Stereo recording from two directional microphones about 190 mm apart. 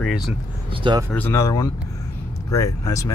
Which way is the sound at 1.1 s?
10° left (ahead or behind).